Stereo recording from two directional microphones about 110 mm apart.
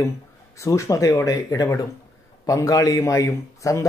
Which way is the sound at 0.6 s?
30° left (ahead or behind).